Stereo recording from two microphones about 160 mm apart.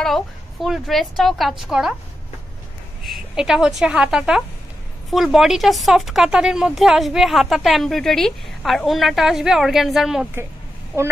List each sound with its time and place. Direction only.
0.0 s a woman's voice: centre (ahead or behind)
3.1 s a woman's voice: 5° right (ahead or behind)